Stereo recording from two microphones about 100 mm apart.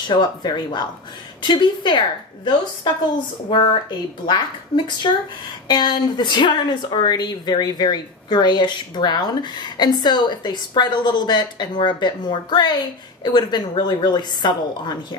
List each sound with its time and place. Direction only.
0.1 s a woman's voice: 45° left (ahead or behind)